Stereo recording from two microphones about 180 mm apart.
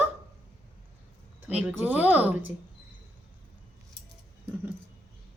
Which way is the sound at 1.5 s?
10° right (ahead or behind).